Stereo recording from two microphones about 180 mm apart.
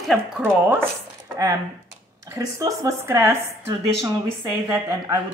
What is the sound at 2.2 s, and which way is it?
A woman's voice, 15° right (ahead or behind).